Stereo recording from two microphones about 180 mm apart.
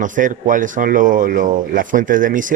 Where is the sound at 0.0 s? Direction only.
45° right (ahead or behind).